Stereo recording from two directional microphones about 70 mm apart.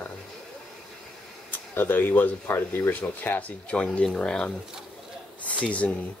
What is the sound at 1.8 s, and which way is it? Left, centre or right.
Speech, left.